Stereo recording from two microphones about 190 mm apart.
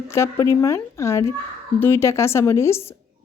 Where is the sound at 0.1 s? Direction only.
15° left (ahead or behind).